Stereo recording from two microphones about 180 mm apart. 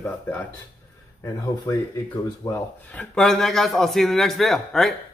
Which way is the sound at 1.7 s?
15° left (ahead or behind).